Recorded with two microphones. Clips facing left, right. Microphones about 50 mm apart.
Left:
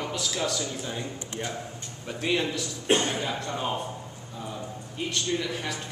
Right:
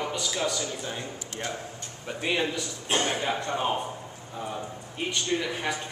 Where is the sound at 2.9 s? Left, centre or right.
Right.